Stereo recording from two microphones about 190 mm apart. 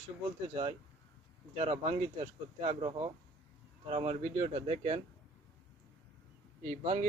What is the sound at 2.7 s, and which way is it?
Speech, 30° right (ahead or behind).